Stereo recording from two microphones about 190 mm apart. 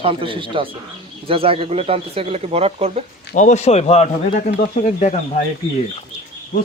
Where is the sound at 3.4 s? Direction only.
35° left (ahead or behind).